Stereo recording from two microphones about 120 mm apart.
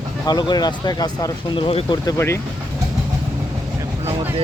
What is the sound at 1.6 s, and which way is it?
Speech, 55° left (ahead or behind).